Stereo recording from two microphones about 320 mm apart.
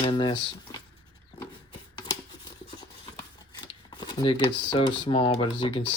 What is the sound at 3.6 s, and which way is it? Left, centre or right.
Speech, centre.